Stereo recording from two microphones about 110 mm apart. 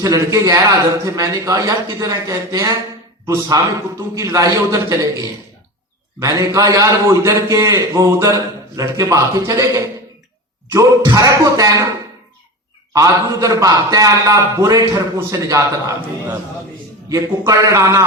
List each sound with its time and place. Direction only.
0.0 s a man's voice: 30° right (ahead or behind)
6.1 s a man's voice: 30° right (ahead or behind)
12.9 s a man's voice: 30° right (ahead or behind)
17.1 s a man's voice: 30° right (ahead or behind)